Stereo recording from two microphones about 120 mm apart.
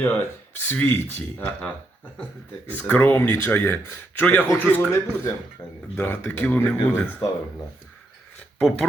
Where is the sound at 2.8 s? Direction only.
15° left (ahead or behind).